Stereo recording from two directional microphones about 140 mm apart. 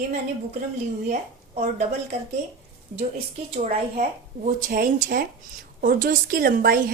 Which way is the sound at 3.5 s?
55° right (ahead or behind).